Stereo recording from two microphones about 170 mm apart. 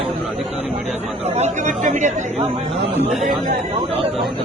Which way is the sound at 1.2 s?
40° right (ahead or behind).